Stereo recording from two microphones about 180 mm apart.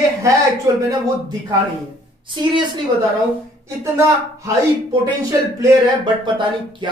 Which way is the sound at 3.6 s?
15° right (ahead or behind).